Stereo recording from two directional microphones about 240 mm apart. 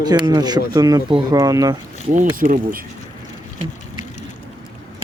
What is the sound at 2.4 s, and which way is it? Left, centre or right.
Speech, right.